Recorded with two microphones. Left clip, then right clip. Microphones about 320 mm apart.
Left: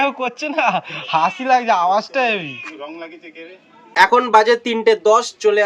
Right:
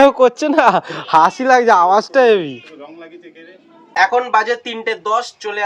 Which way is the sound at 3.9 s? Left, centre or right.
Centre.